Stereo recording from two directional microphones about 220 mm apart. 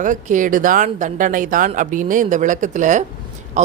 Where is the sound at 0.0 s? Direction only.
35° right (ahead or behind).